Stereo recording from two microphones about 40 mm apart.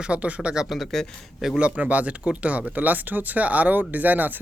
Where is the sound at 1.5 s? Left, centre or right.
Right.